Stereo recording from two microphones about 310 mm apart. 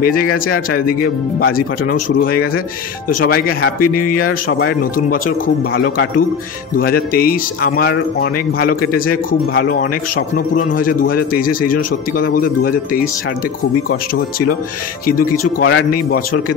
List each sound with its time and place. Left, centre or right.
0.0 s speech: left
15.0 s speech: left